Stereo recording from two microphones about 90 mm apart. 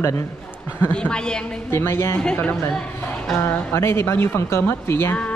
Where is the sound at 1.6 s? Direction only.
30° left (ahead or behind).